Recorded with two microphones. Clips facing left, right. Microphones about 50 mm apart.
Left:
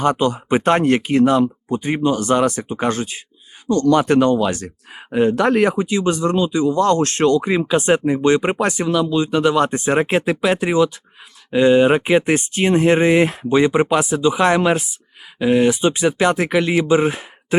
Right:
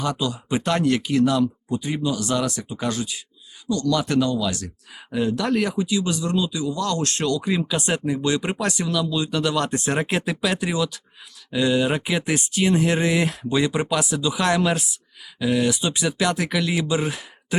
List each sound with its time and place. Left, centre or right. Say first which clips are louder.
0.0 s speech: left 8 dB; left